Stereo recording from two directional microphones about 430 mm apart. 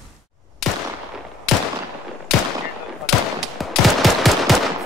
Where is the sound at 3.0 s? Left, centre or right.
Centre.